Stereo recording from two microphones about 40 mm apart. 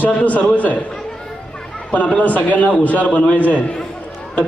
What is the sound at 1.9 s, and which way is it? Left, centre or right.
A man's voice, left.